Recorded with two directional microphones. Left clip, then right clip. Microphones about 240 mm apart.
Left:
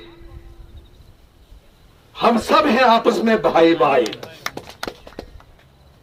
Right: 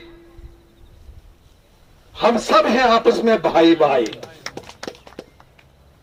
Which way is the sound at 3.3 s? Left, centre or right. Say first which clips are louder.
Left 1 dB; right.